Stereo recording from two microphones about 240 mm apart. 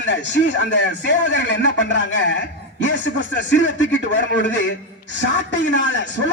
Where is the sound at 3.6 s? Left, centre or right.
Left.